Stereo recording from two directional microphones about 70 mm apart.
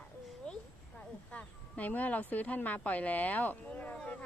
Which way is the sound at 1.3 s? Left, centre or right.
Left.